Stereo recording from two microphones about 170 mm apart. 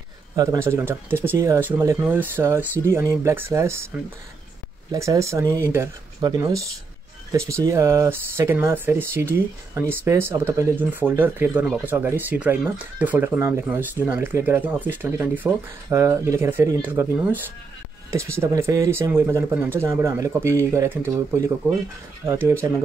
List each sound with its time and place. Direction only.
0.4 s speech: 20° right (ahead or behind)
4.9 s speech: 15° right (ahead or behind)